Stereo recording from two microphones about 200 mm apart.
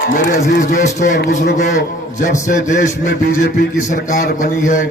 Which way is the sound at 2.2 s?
40° left (ahead or behind).